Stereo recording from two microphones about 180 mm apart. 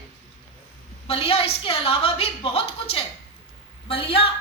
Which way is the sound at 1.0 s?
30° left (ahead or behind).